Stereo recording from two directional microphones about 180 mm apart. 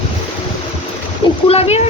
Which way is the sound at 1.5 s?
35° left (ahead or behind).